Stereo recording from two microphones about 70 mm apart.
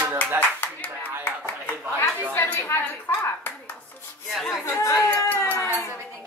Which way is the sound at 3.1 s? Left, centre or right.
Left.